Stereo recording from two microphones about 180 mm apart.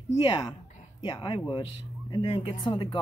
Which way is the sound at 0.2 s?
25° left (ahead or behind).